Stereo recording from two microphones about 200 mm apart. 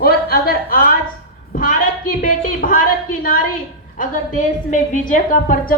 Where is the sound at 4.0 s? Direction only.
40° left (ahead or behind).